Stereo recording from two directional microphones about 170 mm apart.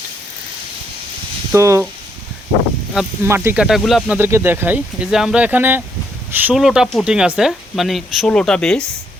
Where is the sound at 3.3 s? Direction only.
15° right (ahead or behind); by 8.8 s 5° left (ahead or behind).